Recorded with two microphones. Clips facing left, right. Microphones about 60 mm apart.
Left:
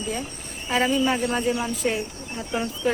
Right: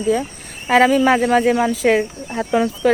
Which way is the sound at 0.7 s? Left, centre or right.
Right.